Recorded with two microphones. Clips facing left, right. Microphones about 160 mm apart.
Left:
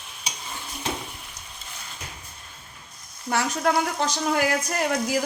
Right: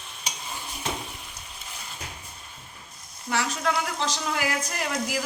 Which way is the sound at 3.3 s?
50° left (ahead or behind).